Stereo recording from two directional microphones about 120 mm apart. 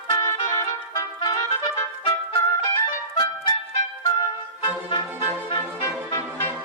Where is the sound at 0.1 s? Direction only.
25° left (ahead or behind).